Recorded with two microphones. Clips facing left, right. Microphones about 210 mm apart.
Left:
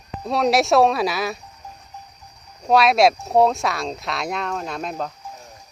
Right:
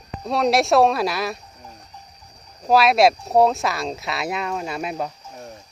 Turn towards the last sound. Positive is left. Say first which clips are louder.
# right 1 dB
turn(degrees=-5)  # may be behind; listen again after turning